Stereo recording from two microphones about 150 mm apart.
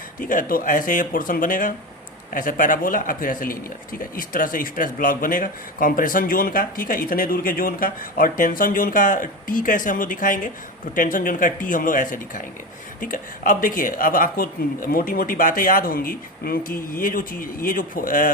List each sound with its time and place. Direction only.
0.2 s a man's voice: 65° left (ahead or behind)